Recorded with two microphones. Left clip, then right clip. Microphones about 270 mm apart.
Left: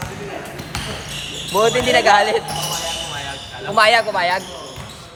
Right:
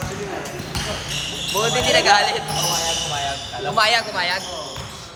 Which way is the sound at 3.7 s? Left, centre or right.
Left.